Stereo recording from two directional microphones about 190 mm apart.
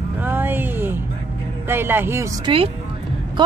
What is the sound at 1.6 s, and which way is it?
Speech, 10° right (ahead or behind).